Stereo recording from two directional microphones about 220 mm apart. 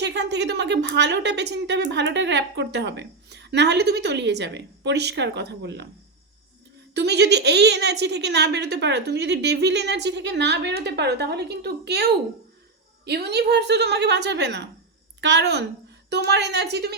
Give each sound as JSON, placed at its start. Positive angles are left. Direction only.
{"t": 0.0, "sound": "a woman's voice", "side_deg": -50}
{"t": 6.9, "sound": "a woman's voice", "side_deg": -50}
{"t": 13.1, "sound": "a woman's voice", "side_deg": -50}